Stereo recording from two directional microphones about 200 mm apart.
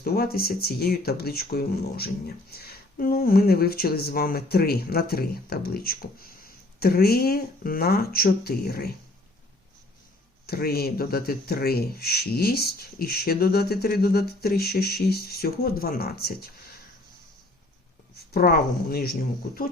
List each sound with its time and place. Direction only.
0.0 s speech: 50° left (ahead or behind)
10.4 s speech: 50° left (ahead or behind)
18.3 s speech: 50° left (ahead or behind)